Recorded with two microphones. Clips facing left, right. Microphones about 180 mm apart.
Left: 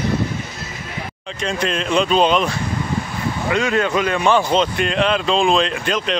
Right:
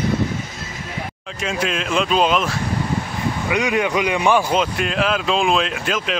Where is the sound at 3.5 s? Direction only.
15° right (ahead or behind).